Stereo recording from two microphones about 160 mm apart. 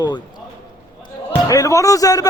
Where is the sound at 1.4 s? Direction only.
20° left (ahead or behind).